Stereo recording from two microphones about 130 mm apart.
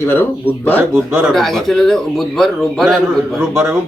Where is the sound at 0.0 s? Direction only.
15° left (ahead or behind).